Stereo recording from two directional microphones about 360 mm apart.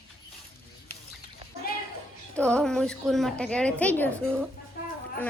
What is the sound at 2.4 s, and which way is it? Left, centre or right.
A woman's voice, centre.